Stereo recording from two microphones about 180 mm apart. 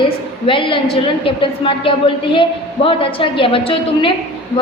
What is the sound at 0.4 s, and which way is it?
A woman's voice, 30° left (ahead or behind).